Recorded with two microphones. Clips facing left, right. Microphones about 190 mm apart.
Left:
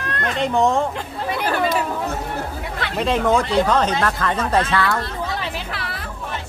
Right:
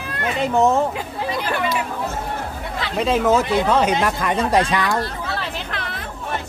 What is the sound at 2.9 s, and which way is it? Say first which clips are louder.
Speech: right 1 dB; centre (ahead or behind).